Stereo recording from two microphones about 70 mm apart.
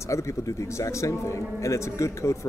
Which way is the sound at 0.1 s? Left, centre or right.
Left.